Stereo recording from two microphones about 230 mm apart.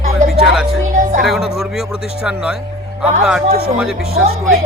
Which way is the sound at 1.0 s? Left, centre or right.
Right.